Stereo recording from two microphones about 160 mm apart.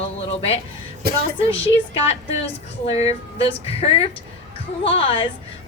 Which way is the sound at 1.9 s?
40° left (ahead or behind).